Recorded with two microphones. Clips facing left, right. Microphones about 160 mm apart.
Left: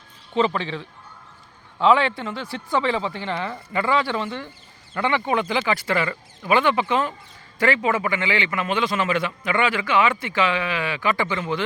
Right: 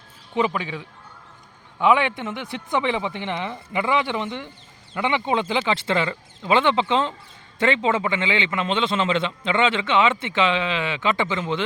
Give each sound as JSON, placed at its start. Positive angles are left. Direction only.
{"t": 0.3, "sound": "a man's voice", "side_deg": -10}